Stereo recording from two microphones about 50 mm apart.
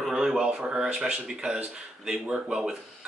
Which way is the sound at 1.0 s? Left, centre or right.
Centre.